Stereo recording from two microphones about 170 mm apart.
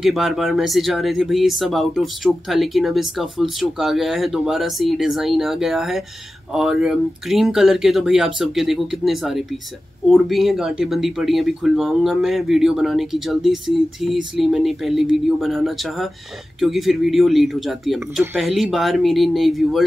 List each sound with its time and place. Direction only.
0.0 s speech: centre (ahead or behind)